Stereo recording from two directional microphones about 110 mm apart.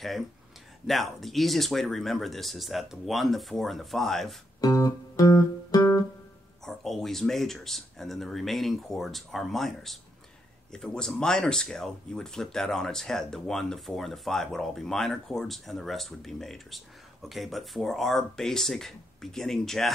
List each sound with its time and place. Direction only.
0.8 s speech: centre (ahead or behind)
4.6 s guitar: 35° left (ahead or behind)
6.6 s speech: centre (ahead or behind)